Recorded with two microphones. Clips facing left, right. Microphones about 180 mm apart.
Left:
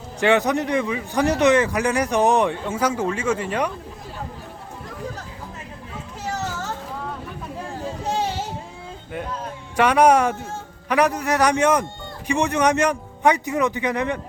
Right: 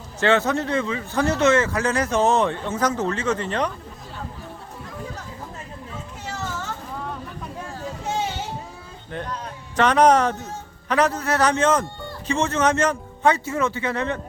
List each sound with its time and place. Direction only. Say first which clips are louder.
0.2 s a man's voice: left 1 dB; 15° left (ahead or behind)
6.3 s children playing: left 2 dB; 40° left (ahead or behind)
9.1 s a man's voice: left 1 dB; 5° left (ahead or behind)